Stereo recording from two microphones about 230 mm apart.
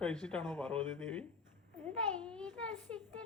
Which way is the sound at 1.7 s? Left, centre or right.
Centre.